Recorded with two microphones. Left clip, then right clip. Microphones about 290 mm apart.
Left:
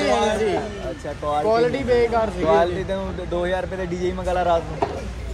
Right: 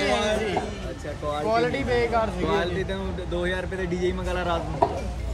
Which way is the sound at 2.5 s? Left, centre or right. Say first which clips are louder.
Left 7 dB; centre.